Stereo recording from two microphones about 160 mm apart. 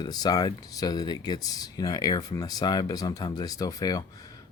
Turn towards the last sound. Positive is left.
turn(degrees=25)  # may be behind; listen again after turning